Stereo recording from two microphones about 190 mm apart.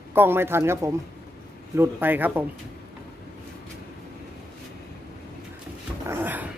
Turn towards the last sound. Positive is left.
turn(degrees=-10)  # may be behind; listen again after turning